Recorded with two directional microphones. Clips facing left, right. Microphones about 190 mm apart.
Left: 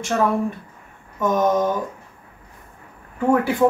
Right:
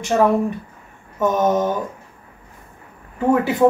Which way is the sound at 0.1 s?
20° right (ahead or behind).